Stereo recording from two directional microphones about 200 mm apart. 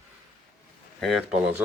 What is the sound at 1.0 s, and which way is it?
Speech, centre (ahead or behind).